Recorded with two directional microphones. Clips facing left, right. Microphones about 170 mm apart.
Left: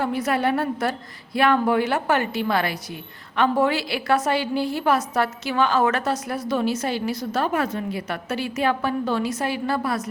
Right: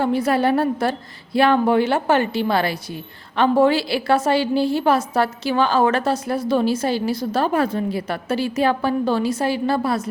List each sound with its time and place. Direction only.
0.0 s a woman's voice: 30° right (ahead or behind)